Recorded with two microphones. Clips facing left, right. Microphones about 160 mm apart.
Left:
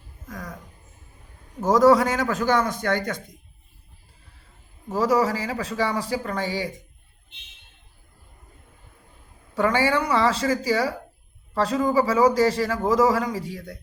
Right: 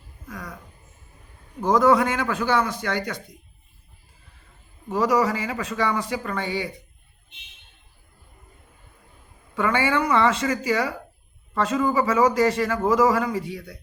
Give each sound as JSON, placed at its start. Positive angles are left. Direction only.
{"t": 0.3, "sound": "a sound", "side_deg": 40}
{"t": 1.6, "sound": "a man's voice", "side_deg": 40}
{"t": 4.9, "sound": "a man's voice", "side_deg": 35}
{"t": 9.6, "sound": "a man's voice", "side_deg": 40}